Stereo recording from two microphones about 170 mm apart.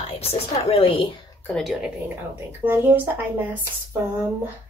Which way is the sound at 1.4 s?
Centre (ahead or behind).